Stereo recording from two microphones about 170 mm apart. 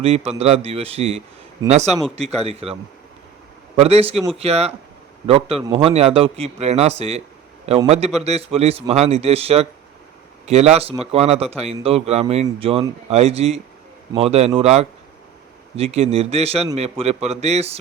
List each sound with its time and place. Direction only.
0.0 s a man's voice: 35° right (ahead or behind)
3.8 s a man's voice: 35° right (ahead or behind)